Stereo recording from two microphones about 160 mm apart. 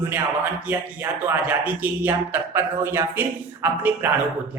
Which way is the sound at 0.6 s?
10° right (ahead or behind).